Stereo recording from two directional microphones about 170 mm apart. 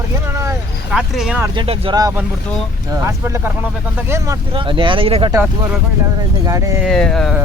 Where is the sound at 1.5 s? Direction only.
30° right (ahead or behind).